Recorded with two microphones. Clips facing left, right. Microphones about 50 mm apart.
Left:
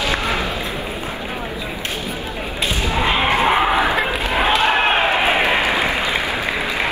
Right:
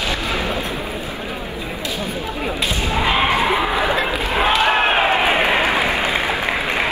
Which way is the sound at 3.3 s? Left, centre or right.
Left.